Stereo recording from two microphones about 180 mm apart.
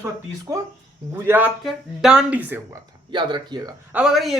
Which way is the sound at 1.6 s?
Centre (ahead or behind).